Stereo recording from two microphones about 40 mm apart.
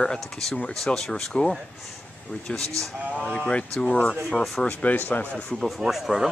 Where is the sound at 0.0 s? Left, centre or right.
Centre.